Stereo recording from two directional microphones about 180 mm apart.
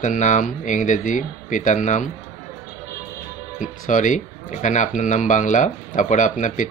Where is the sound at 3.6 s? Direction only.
45° left (ahead or behind).